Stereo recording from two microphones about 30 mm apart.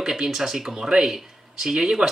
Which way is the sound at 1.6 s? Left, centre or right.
Centre.